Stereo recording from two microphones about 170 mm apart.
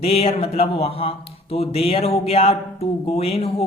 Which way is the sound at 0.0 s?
35° left (ahead or behind).